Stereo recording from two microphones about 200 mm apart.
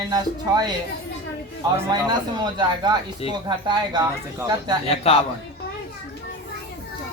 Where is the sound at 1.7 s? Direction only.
20° right (ahead or behind).